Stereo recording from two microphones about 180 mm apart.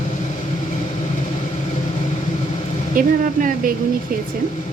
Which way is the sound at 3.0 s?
50° right (ahead or behind).